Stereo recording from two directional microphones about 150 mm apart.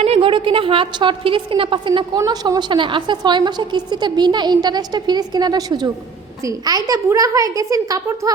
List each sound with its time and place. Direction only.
0.0 s a woman's voice: 40° right (ahead or behind); by 8.3 s 20° right (ahead or behind)